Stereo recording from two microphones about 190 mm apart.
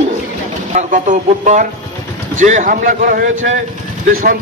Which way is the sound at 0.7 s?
40° right (ahead or behind).